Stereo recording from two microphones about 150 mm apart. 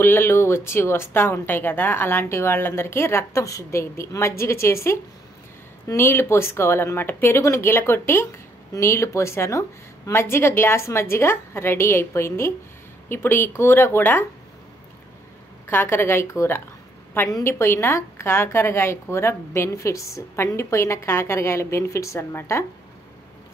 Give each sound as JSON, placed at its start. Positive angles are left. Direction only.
{"t": 0.0, "sound": "a woman's voice", "side_deg": 15}
{"t": 15.7, "sound": "a woman's voice", "side_deg": 15}